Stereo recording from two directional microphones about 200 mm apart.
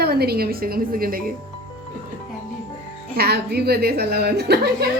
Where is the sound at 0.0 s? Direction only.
50° right (ahead or behind).